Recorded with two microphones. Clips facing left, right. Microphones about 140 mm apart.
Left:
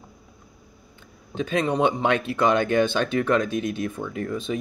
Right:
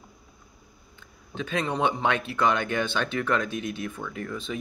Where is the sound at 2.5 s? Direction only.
40° left (ahead or behind).